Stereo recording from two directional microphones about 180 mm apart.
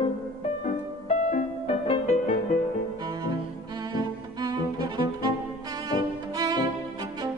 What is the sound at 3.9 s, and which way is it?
Music, 25° right (ahead or behind).